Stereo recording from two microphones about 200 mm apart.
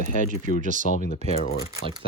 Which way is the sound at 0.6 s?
40° right (ahead or behind).